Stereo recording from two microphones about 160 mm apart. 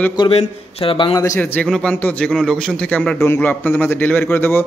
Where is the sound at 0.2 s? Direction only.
35° left (ahead or behind).